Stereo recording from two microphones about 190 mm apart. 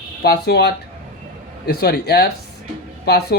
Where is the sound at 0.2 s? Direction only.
60° left (ahead or behind).